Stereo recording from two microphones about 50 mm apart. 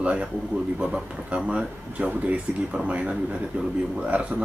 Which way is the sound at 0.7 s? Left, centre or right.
Centre.